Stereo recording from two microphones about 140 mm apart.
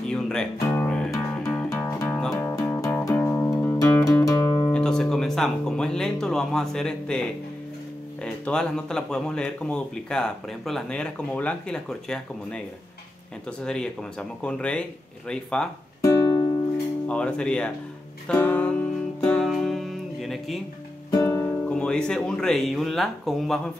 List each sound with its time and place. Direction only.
0.1 s music: 5° left (ahead or behind)
0.6 s music: 20° left (ahead or behind)
0.8 s music: 5° left (ahead or behind); by 4.7 s 25° left (ahead or behind)
4.7 s guitar: 5° left (ahead or behind)
5.1 s a man's voice: 5° left (ahead or behind)
16.0 s music: 25° left (ahead or behind)
17.1 s speech: 5° left (ahead or behind)
18.3 s music: 10° left (ahead or behind)
21.1 s music: 20° left (ahead or behind)
21.7 s a man's voice: 5° left (ahead or behind)